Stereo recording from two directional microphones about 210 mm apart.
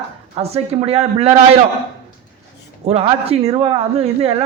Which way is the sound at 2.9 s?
30° right (ahead or behind).